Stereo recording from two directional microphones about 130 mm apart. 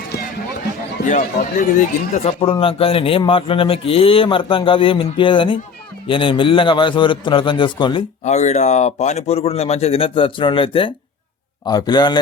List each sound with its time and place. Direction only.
1.0 s speech: 75° left (ahead or behind)
2.2 s a man's voice: 45° left (ahead or behind)
8.2 s a man's voice: 60° left (ahead or behind); by 12.2 s 35° left (ahead or behind)